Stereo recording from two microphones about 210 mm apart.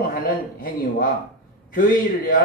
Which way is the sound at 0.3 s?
40° left (ahead or behind).